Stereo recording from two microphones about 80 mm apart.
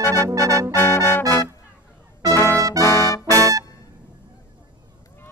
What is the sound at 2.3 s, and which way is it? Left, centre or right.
Brass instrument, left.